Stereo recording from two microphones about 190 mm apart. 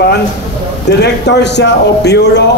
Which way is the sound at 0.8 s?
60° left (ahead or behind).